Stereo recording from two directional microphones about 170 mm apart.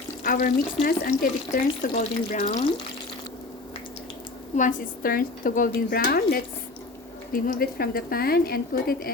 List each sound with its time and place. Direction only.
0.3 s a woman's voice: 55° left (ahead or behind)
4.5 s a woman's voice: 50° left (ahead or behind)